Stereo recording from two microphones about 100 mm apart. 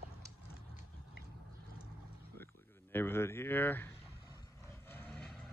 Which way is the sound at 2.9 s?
25° left (ahead or behind).